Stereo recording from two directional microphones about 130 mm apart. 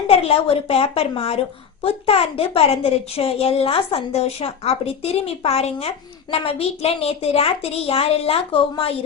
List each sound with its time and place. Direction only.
0.1 s a woman's voice: 50° left (ahead or behind)